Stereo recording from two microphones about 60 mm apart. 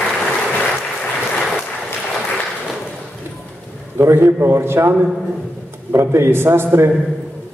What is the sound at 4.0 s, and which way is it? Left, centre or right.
Speech, right.